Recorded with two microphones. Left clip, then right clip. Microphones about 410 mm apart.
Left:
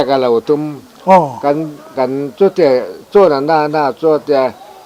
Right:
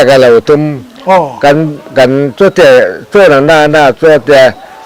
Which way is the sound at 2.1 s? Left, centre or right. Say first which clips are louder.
Right 6 dB; centre.